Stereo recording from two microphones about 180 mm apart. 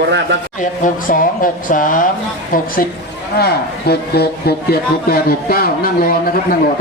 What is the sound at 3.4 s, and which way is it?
Speech, 60° left (ahead or behind).